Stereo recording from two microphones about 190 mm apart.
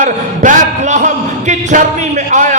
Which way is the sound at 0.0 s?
40° right (ahead or behind).